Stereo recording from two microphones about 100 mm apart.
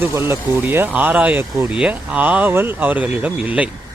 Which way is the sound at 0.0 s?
25° right (ahead or behind).